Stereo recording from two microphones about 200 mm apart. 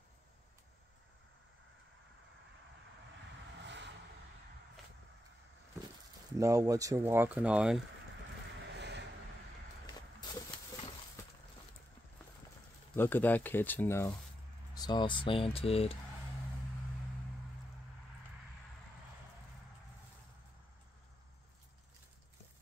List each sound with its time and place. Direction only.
3.6 s vehicle: 60° right (ahead or behind)
6.3 s speech: 15° right (ahead or behind)
8.7 s vehicle: 60° right (ahead or behind)
12.9 s speech: 10° left (ahead or behind); by 16.0 s 30° left (ahead or behind)